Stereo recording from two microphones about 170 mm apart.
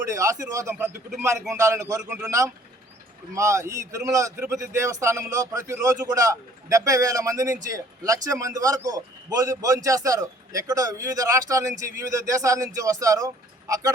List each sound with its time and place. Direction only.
0.1 s a man's voice: 20° right (ahead or behind)